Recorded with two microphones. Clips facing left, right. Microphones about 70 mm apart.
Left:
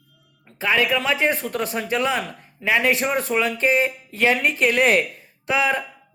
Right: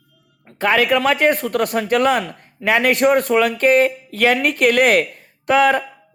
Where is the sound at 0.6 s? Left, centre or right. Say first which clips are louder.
Right 5 dB; right.